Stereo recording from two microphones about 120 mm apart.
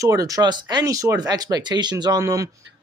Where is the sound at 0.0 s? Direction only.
30° right (ahead or behind).